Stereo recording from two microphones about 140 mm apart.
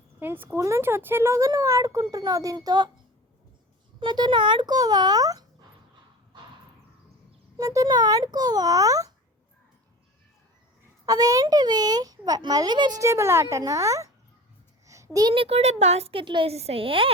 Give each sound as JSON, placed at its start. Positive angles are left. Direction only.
{"t": 0.2, "sound": "a child's voice", "side_deg": -15}
{"t": 4.0, "sound": "a child's voice", "side_deg": -30}
{"t": 7.6, "sound": "a child's voice", "side_deg": -25}
{"t": 11.0, "sound": "a child's voice", "side_deg": -25}